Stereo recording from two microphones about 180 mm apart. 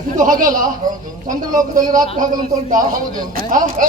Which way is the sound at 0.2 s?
45° right (ahead or behind).